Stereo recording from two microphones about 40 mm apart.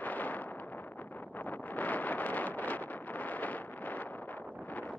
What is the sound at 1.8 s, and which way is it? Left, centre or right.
Wind noise, left.